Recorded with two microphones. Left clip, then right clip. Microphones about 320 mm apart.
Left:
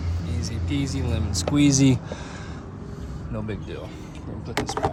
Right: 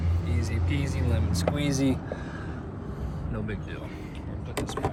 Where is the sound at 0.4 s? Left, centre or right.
Centre.